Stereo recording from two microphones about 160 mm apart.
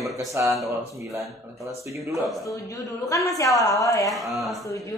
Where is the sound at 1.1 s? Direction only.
Centre (ahead or behind).